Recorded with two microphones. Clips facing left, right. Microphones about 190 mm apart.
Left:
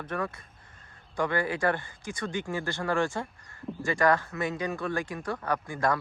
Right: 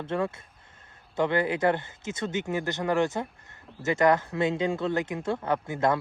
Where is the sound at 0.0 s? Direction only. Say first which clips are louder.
Right 4 dB; 25° right (ahead or behind).